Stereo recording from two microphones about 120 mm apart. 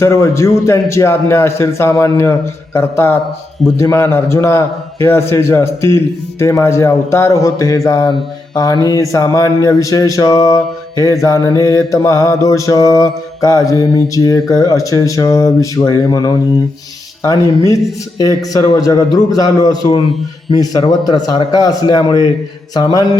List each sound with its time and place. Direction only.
0.0 s mantra: 25° left (ahead or behind)
7.9 s a man's voice: 30° left (ahead or behind)
8.5 s mantra: 35° left (ahead or behind)
18.2 s a man's voice: 30° left (ahead or behind)